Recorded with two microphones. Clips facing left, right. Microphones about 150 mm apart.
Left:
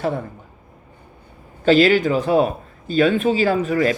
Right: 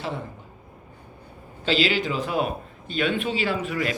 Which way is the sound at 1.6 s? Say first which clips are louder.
Left 9 dB; 50° left (ahead or behind).